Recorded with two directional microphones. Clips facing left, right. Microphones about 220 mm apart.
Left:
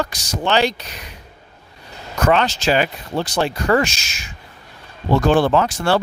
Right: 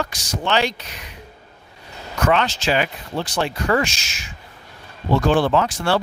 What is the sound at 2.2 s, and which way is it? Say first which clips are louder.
Speech: left 2 dB; 40° left (ahead or behind).